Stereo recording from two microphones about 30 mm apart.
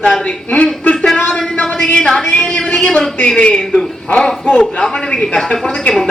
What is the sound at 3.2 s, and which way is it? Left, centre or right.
Speech, left.